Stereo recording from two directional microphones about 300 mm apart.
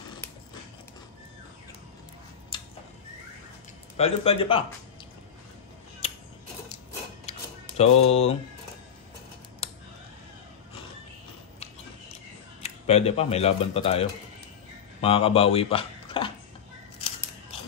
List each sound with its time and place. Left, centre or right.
2.5 s tick-tock: centre
3.9 s speech: centre
7.3 s a sound: left
7.7 s speech: left
12.6 s speech: left